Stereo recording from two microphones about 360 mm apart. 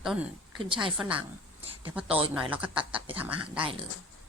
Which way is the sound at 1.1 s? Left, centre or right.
Centre.